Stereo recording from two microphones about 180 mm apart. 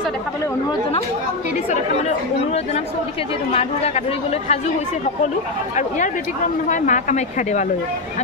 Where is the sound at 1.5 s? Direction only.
40° left (ahead or behind).